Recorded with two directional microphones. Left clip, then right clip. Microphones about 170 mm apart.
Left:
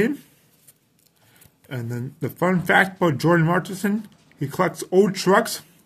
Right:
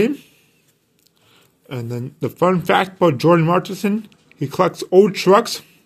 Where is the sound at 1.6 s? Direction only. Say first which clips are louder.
Right 4 dB; 15° right (ahead or behind).